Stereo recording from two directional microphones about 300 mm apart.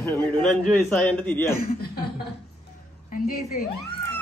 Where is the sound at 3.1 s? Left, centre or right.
Left.